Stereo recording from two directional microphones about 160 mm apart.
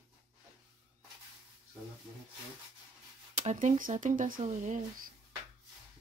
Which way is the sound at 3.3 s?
50° right (ahead or behind).